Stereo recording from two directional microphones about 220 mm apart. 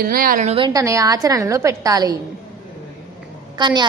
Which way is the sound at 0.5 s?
20° right (ahead or behind).